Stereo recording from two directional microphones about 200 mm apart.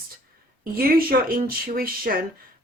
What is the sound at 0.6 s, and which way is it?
Speech, 45° right (ahead or behind).